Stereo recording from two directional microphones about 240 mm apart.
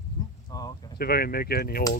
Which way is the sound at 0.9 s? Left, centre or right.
Left.